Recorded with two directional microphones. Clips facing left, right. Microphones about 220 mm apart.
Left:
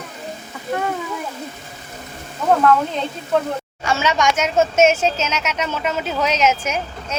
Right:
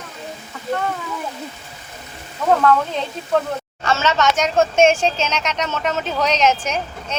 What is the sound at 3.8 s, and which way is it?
Speech, 10° left (ahead or behind).